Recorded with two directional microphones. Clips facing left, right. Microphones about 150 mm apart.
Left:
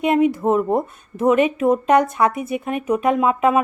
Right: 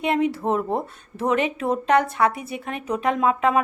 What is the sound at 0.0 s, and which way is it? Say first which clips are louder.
Speech: left 5 dB; 15° left (ahead or behind).